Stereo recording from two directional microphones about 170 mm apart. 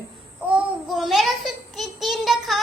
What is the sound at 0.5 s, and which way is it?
Child singing, centre (ahead or behind).